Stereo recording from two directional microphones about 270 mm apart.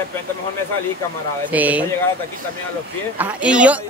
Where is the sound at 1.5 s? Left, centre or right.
Centre.